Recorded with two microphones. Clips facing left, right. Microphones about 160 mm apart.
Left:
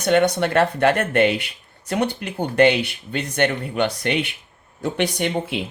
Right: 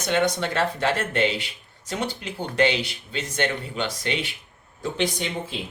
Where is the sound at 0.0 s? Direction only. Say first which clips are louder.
Left 6 dB; 60° left (ahead or behind).